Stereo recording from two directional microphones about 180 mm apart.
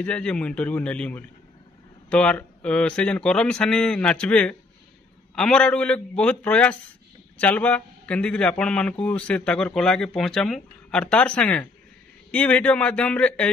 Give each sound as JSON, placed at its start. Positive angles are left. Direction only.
{"t": 0.0, "sound": "a man's voice", "side_deg": 5}